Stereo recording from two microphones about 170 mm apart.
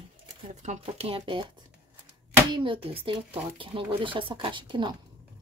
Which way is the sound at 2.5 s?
30° right (ahead or behind).